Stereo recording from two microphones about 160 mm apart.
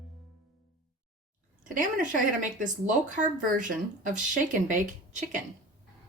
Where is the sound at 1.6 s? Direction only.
55° right (ahead or behind).